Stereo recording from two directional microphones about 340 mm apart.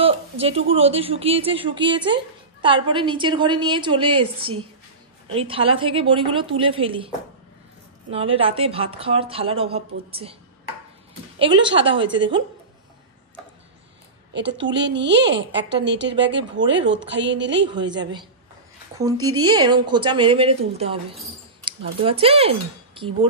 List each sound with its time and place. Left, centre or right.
0.0 s speech: centre
8.1 s speech: centre
11.3 s speech: centre
14.3 s a woman's voice: right
17.6 s speech: centre
19.4 s speech: centre